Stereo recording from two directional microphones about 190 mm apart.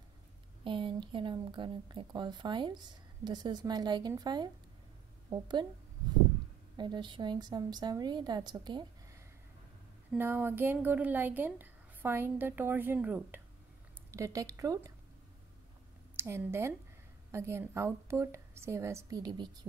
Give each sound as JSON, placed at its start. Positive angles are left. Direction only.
{"t": 0.7, "sound": "speech", "side_deg": -25}
{"t": 6.8, "sound": "speech", "side_deg": -25}
{"t": 10.1, "sound": "a woman's voice", "side_deg": -10}
{"t": 16.2, "sound": "a woman's voice", "side_deg": -10}